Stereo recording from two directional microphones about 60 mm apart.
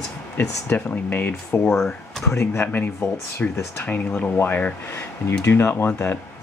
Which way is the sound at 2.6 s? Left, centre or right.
Left.